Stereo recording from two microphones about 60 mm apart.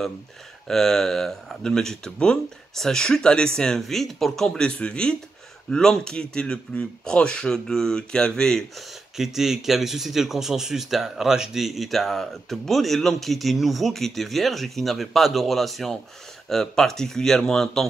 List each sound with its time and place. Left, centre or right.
0.7 s speech: centre
4.6 s speech: centre
9.1 s speech: centre